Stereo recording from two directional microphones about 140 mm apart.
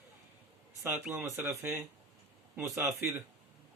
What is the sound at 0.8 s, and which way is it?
A man's voice, 15° right (ahead or behind).